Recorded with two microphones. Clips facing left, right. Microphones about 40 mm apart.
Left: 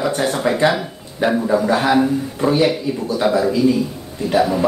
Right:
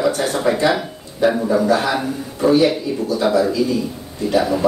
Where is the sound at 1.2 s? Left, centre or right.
Left.